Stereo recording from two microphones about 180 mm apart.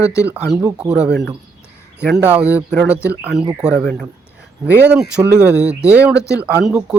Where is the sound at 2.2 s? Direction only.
10° right (ahead or behind); by 4.0 s 10° left (ahead or behind).